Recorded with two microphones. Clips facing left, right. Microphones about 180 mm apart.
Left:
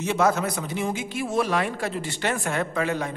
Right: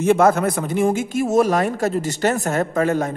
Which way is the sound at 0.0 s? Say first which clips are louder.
Right 7 dB; 50° right (ahead or behind).